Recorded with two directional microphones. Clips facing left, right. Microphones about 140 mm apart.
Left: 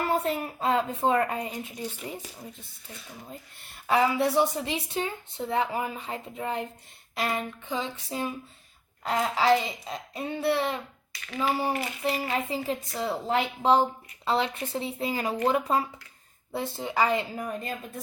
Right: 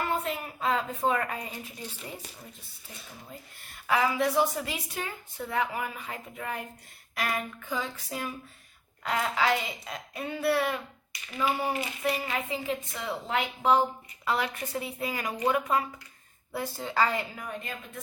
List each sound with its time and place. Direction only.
0.1 s a woman's voice: 35° left (ahead or behind)
3.8 s a woman's voice: 30° left (ahead or behind)
11.3 s speech: 5° right (ahead or behind)
12.0 s a woman's voice: 30° left (ahead or behind)
17.3 s a woman's voice: 35° left (ahead or behind)